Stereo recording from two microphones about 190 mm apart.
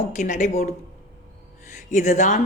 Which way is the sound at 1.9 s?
40° left (ahead or behind).